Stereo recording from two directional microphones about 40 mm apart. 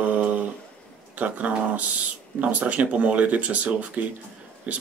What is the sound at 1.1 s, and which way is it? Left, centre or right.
Speech, right.